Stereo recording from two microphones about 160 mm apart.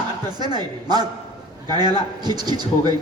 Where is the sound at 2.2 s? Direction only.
25° right (ahead or behind).